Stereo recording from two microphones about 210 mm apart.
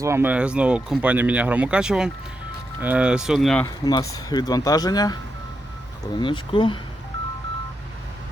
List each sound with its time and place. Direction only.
0.0 s speech: 10° right (ahead or behind)
4.1 s speech: 20° left (ahead or behind)
6.1 s speech: 25° left (ahead or behind)